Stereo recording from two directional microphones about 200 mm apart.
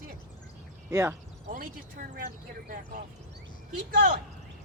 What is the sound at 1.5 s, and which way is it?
Speech, 45° right (ahead or behind).